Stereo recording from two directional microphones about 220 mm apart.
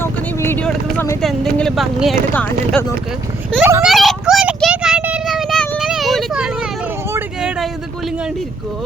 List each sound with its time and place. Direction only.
0.0 s vehicle: 10° left (ahead or behind)
1.2 s speech: centre (ahead or behind)
3.6 s a sound: 10° right (ahead or behind)
7.1 s vehicle: 5° right (ahead or behind)